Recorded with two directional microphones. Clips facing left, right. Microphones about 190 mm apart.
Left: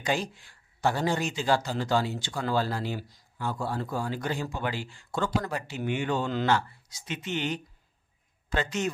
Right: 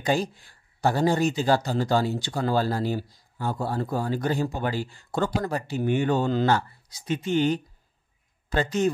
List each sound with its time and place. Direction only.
0.0 s speech: 35° right (ahead or behind)